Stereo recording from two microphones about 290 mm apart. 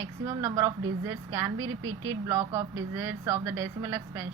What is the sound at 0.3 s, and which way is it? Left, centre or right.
Speech, centre.